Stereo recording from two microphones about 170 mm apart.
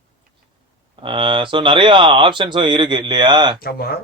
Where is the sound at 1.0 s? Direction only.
30° right (ahead or behind).